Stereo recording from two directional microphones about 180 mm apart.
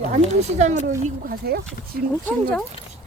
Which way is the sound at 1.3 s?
60° right (ahead or behind).